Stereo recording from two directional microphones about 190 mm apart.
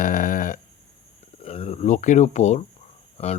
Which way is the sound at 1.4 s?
30° left (ahead or behind).